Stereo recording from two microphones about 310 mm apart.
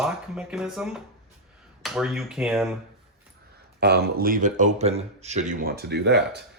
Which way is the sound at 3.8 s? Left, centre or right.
Right.